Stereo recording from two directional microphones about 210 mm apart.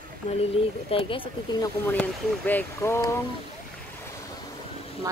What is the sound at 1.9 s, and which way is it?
Speech, 10° left (ahead or behind).